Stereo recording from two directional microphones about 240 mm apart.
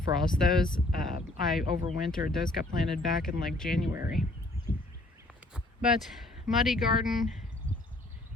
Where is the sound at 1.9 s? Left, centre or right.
Centre.